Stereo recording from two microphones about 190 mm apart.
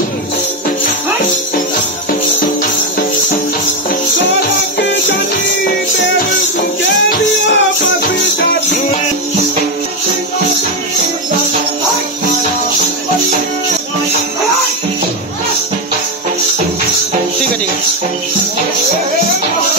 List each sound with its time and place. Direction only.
4.2 s music: 75° left (ahead or behind)
7.4 s music: 75° left (ahead or behind)